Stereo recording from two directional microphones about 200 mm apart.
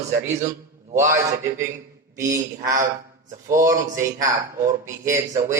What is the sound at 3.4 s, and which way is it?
Speech, 15° right (ahead or behind).